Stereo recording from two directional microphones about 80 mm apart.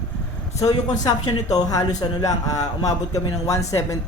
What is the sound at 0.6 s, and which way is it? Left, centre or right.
Speech, left.